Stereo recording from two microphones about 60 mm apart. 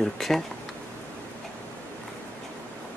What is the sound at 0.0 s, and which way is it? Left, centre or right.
Speech, centre.